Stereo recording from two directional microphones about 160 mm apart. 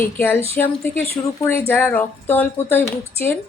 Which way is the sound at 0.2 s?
15° left (ahead or behind).